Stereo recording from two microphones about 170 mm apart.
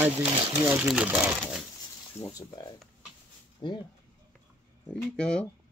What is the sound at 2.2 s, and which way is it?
Speech, 25° left (ahead or behind).